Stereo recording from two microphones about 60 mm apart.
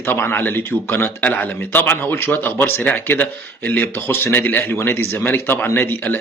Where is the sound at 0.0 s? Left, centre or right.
Left.